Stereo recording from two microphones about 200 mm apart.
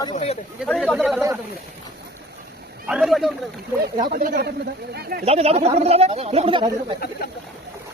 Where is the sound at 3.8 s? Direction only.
45° right (ahead or behind).